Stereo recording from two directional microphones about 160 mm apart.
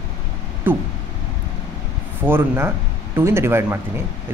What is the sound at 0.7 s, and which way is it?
Speech, 15° right (ahead or behind).